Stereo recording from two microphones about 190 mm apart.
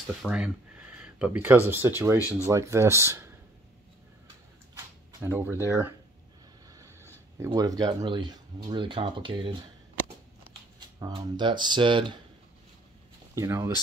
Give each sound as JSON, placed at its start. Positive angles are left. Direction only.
{"t": 0.2, "sound": "speech", "side_deg": -5}
{"t": 5.2, "sound": "speech", "side_deg": -10}
{"t": 11.0, "sound": "speech", "side_deg": -20}
{"t": 13.3, "sound": "speech", "side_deg": -15}